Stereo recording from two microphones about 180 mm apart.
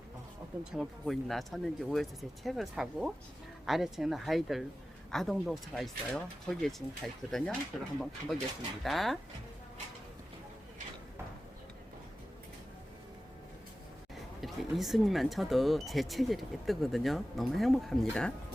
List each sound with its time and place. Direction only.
0.6 s speech: centre (ahead or behind)
14.4 s speech: centre (ahead or behind)